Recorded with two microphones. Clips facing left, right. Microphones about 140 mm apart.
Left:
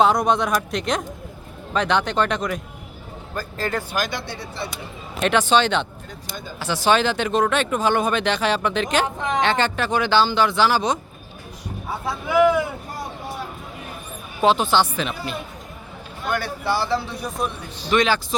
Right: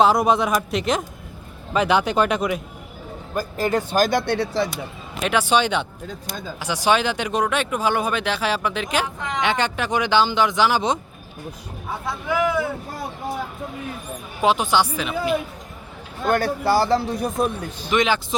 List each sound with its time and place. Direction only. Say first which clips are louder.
0.0 s speech: right 1 dB; 5° right (ahead or behind)
3.9 s speech: right 7 dB; 40° right (ahead or behind)
4.3 s speech: right 10 dB; 80° right
5.2 s speech: left 1 dB; 10° right (ahead or behind)
12.0 s speech: left 5 dB; 10° left (ahead or behind)
14.4 s speech: left 1 dB; 10° right (ahead or behind)
16.2 s a man's voice: right 5 dB; 45° right (ahead or behind)
17.9 s speech: left 1 dB; 20° right (ahead or behind)